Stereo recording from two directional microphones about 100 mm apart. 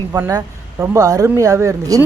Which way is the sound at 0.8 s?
30° right (ahead or behind).